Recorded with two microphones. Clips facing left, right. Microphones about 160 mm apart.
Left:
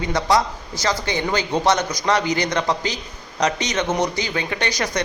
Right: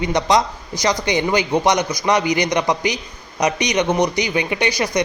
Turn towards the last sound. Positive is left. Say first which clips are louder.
# right 4 dB
turn(degrees=-10)  # may be behind; listen again after turning